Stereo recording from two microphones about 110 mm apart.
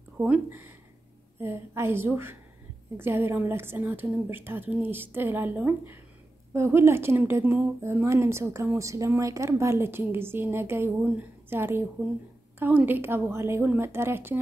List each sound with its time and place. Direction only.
0.5 s a woman's voice: 20° right (ahead or behind)